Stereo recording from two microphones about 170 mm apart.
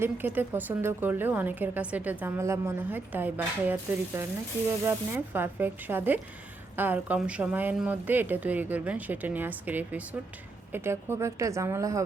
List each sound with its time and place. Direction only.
0.0 s a woman's voice: 10° right (ahead or behind)